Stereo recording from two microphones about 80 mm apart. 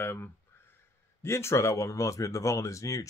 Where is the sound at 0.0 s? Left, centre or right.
Left.